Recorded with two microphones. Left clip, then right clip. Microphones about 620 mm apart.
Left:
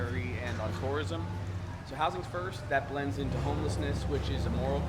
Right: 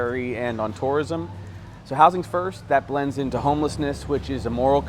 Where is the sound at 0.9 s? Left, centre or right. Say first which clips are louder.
Right 12 dB; right.